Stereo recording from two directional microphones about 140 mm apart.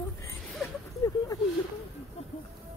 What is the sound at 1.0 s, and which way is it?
Speech, 25° left (ahead or behind).